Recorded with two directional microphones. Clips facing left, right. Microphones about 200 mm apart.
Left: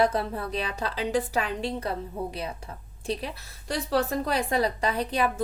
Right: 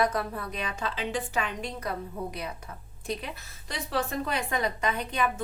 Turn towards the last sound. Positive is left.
turn(degrees=35)  # may be behind; listen again after turning